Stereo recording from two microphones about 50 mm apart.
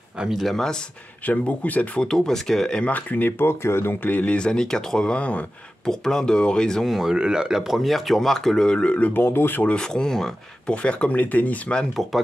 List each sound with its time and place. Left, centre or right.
0.3 s speech: centre
1.2 s speech: left
2.0 s speech: centre
2.8 s speech: left
3.6 s speech: left
4.0 s speech: left
4.4 s speech: centre
5.9 s speech: centre
6.8 s speech: centre
7.1 s speech: centre; by 9.1 s left
9.1 s speech: left
9.7 s speech: centre
10.7 s speech: left
11.9 s speech: centre